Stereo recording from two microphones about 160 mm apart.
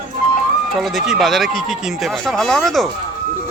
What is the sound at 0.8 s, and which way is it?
Speech, centre (ahead or behind).